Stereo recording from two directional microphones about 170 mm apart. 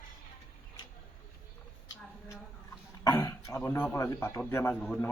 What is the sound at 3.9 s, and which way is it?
A man's voice, 20° left (ahead or behind).